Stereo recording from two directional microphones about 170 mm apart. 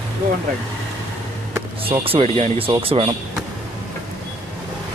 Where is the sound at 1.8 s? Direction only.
35° right (ahead or behind).